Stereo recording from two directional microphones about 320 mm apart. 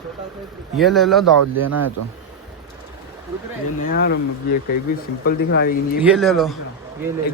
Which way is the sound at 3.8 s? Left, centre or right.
Left.